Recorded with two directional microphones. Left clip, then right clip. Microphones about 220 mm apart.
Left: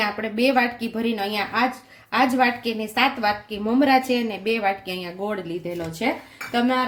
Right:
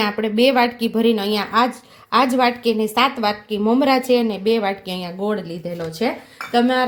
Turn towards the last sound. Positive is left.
turn(degrees=-35)  # may be behind; listen again after turning